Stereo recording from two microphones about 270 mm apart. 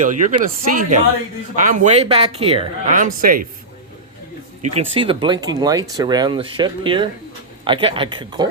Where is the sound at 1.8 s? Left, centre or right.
Right.